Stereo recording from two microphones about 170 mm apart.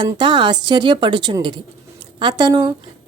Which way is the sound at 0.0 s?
25° right (ahead or behind).